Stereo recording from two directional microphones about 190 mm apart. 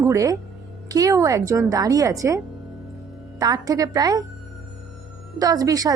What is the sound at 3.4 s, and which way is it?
Speech, 20° right (ahead or behind).